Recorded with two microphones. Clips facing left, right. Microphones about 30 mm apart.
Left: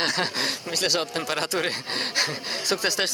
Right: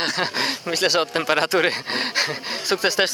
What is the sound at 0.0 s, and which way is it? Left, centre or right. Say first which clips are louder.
Speech: right 2 dB; centre.